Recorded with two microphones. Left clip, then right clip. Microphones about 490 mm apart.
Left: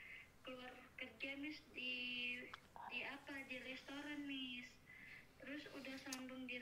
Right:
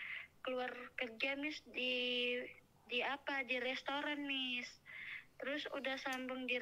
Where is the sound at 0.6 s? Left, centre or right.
Right.